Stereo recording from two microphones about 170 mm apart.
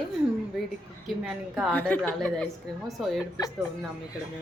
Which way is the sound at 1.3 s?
5° right (ahead or behind).